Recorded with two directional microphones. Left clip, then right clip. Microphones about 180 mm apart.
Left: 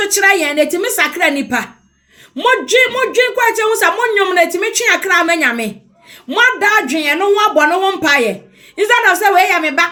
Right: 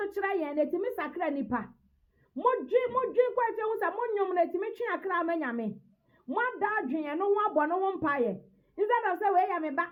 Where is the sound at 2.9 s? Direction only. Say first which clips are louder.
Left 14 dB; 20° left (ahead or behind).